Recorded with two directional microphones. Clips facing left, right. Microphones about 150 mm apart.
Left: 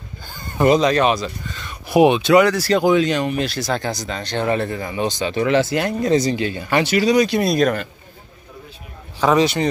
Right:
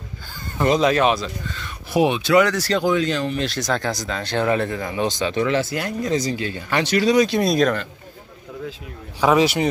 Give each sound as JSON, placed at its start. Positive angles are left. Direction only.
{"t": 0.7, "sound": "speech", "side_deg": -5}
{"t": 2.2, "sound": "speech", "side_deg": 15}
{"t": 5.5, "sound": "speech", "side_deg": 85}
{"t": 6.0, "sound": "speech", "side_deg": 65}
{"t": 6.3, "sound": "speech", "side_deg": 15}
{"t": 9.2, "sound": "speech", "side_deg": -10}